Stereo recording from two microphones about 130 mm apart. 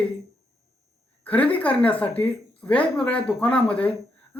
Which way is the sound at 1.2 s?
10° left (ahead or behind).